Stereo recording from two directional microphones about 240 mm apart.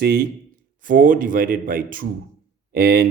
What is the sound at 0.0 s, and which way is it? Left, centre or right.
Speech, right.